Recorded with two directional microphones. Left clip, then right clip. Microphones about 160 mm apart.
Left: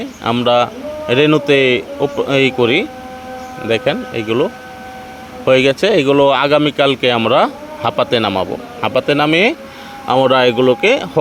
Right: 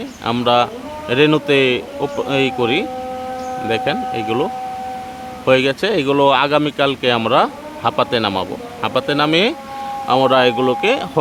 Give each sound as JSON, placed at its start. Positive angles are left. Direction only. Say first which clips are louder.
{"t": 0.4, "sound": "a man's voice", "louder": "left 1 dB", "side_deg": 15}
{"t": 5.5, "sound": "a man's voice", "louder": "left 3 dB", "side_deg": 15}